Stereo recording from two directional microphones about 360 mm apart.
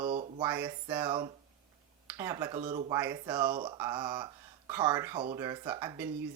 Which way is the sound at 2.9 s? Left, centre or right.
Centre.